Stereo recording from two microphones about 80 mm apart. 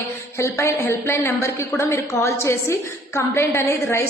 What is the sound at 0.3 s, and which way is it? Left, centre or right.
A woman's voice, left.